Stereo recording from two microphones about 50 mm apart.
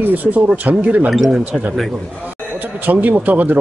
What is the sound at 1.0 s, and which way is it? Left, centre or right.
Speech, centre.